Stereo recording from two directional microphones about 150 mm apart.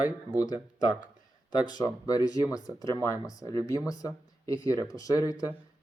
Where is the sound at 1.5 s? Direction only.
25° left (ahead or behind).